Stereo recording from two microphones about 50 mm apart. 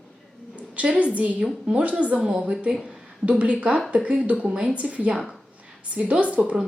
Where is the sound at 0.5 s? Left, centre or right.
Right.